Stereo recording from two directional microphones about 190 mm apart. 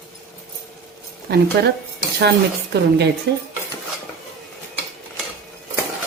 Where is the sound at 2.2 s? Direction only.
60° right (ahead or behind).